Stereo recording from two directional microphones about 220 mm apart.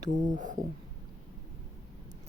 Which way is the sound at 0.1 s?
35° right (ahead or behind).